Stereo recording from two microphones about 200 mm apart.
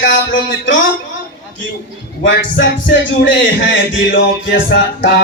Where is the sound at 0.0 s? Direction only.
45° left (ahead or behind).